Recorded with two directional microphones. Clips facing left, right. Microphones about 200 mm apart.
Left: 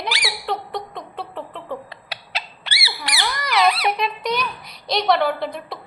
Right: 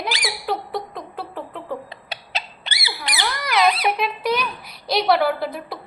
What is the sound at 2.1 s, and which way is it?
Rodents, 20° right (ahead or behind).